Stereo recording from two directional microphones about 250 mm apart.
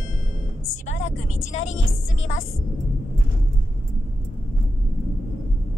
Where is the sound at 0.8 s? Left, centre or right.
Left.